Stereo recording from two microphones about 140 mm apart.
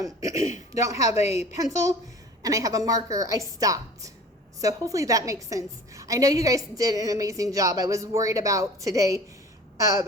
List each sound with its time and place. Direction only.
0.0 s a woman's voice: 25° right (ahead or behind)
1.1 s a woman's voice: 50° left (ahead or behind)
1.5 s a woman's voice: 25° right (ahead or behind)